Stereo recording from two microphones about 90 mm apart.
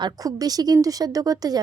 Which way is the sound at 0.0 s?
45° right (ahead or behind).